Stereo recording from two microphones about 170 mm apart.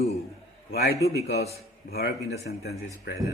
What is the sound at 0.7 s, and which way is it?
Speech, 65° left (ahead or behind).